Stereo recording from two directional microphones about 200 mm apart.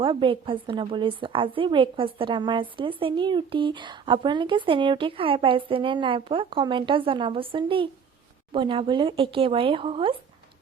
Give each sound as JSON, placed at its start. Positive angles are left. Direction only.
{"t": 0.0, "sound": "a woman's voice", "side_deg": -25}